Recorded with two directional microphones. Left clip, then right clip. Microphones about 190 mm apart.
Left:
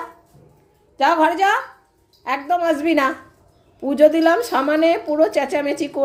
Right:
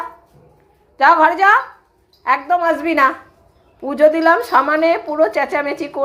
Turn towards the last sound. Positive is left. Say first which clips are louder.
# right 1 dB
turn(degrees=30)  # may be behind; listen again after turning